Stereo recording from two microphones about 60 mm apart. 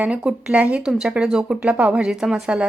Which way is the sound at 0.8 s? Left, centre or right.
Centre.